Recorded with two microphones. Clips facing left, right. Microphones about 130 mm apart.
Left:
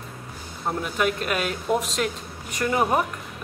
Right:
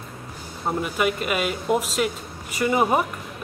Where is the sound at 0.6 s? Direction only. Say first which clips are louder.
Right 1 dB; 5° right (ahead or behind).